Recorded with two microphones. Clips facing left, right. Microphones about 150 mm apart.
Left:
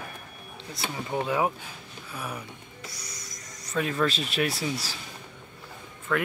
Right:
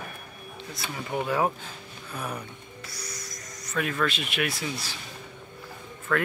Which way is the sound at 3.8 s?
25° left (ahead or behind).